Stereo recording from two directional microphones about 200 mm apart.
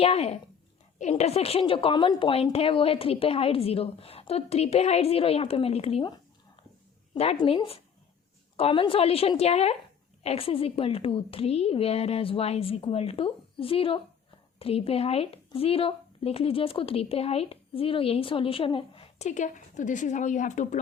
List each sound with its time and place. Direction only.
0.0 s speech: 30° left (ahead or behind)